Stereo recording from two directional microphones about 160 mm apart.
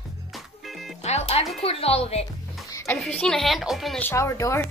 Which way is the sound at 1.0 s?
40° left (ahead or behind).